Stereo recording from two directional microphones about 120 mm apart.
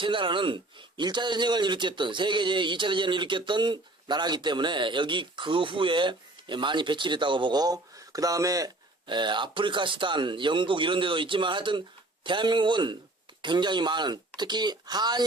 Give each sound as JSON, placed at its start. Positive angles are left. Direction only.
{"t": 0.0, "sound": "a man's voice", "side_deg": -45}